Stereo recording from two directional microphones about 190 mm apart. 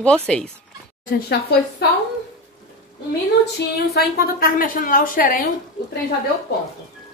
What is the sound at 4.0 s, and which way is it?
A woman's voice, 50° left (ahead or behind).